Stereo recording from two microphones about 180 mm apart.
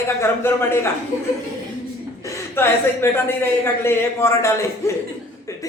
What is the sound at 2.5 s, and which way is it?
A man's voice, 15° left (ahead or behind).